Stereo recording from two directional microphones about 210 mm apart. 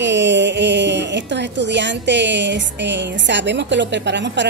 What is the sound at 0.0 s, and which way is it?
Speech, 55° right (ahead or behind).